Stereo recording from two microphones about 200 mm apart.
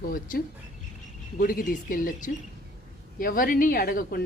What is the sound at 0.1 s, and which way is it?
Speech, 45° left (ahead or behind).